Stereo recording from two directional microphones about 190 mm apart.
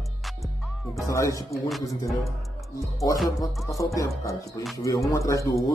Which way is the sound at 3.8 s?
15° left (ahead or behind).